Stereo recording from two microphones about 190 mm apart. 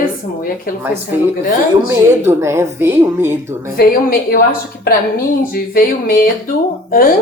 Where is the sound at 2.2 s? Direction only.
15° right (ahead or behind).